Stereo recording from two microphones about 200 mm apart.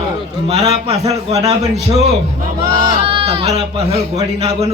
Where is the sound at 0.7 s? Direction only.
30° right (ahead or behind).